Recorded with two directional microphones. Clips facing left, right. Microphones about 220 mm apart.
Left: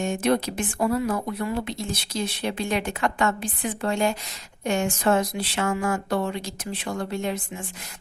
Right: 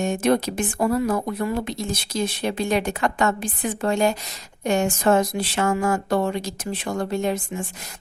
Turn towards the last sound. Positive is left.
turn(degrees=-40)  # may be behind; listen again after turning